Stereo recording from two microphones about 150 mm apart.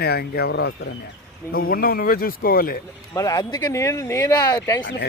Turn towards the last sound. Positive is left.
turn(degrees=25)  # may be behind; listen again after turning